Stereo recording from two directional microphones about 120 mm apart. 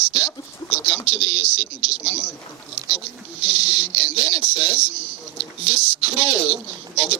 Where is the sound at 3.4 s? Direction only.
10° right (ahead or behind).